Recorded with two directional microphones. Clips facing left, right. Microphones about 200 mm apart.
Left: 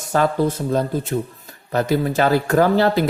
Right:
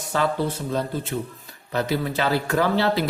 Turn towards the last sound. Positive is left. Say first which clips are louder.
# left 5 dB
turn(degrees=45)  # may be behind; listen again after turning